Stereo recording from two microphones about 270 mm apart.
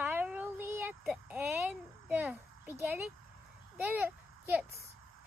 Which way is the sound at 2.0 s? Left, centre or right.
Centre.